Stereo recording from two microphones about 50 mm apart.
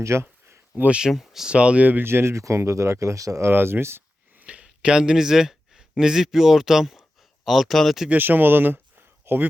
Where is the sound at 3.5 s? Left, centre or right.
Right.